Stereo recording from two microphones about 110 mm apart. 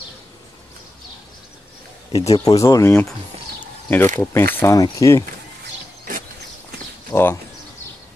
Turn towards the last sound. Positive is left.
turn(degrees=20)  # may be behind; listen again after turning